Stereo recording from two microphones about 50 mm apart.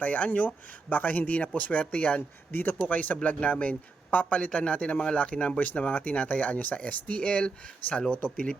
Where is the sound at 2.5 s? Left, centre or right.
Left.